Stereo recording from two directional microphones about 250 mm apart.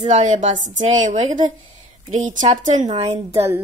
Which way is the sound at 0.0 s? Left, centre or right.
Right.